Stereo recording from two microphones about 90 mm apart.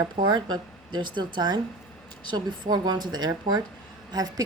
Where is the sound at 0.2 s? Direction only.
55° right (ahead or behind).